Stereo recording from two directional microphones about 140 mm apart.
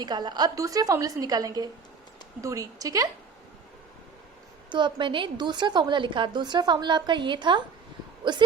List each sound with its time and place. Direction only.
0.0 s a woman's voice: 30° right (ahead or behind)
4.7 s a woman's voice: 35° right (ahead or behind)